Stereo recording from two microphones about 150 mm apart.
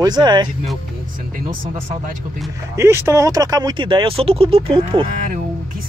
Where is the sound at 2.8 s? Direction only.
20° right (ahead or behind); by 5.1 s 40° right (ahead or behind).